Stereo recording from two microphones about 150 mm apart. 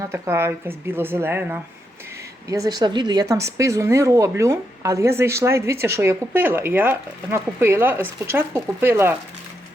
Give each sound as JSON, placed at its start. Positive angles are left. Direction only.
{"t": 0.0, "sound": "a woman's voice", "side_deg": -15}